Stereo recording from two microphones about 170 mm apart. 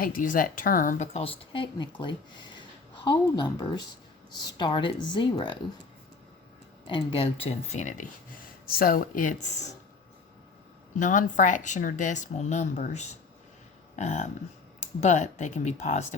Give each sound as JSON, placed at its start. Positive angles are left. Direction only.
{"t": 0.0, "sound": "speech", "side_deg": 55}
{"t": 6.8, "sound": "speech", "side_deg": 30}
{"t": 8.6, "sound": "speech", "side_deg": 60}
{"t": 10.9, "sound": "speech", "side_deg": 50}